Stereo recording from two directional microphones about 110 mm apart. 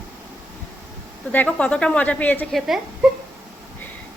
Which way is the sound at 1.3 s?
15° left (ahead or behind).